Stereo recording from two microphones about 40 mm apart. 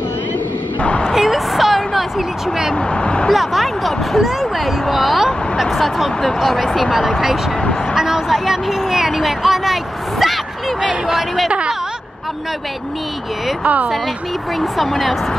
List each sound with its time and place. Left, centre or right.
0.7 s a sound: left
1.1 s a sound: centre
2.7 s speech: left
3.3 s speech: centre
7.9 s speech: centre
14.6 s speech: centre